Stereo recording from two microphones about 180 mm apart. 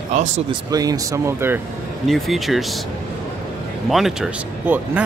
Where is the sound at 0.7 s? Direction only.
20° right (ahead or behind).